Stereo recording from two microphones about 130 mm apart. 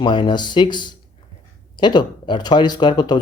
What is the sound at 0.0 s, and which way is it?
Speech, 35° left (ahead or behind).